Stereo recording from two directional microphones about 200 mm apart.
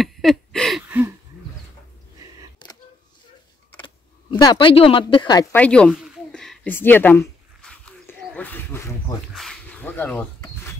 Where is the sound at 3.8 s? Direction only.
20° left (ahead or behind).